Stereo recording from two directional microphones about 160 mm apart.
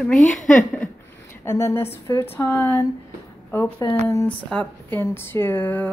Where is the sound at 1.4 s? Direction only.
20° left (ahead or behind).